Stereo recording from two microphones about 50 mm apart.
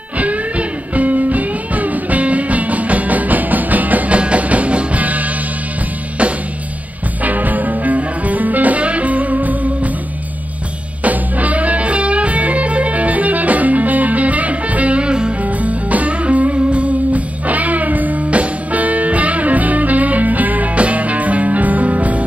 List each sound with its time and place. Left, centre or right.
0.2 s music: right
7.2 s music: right
11.0 s music: right
15.4 s music: right